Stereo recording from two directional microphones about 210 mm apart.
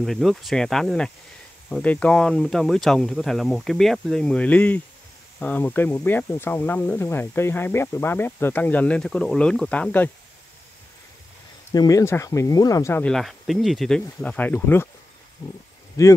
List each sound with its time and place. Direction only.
0.0 s speech: centre (ahead or behind)
11.7 s speech: 15° left (ahead or behind)